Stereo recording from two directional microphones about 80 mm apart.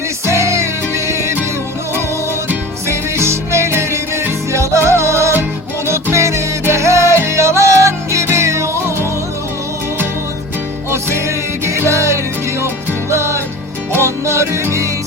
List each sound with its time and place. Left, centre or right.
0.3 s music: right
2.5 s music: right
11.6 s music: right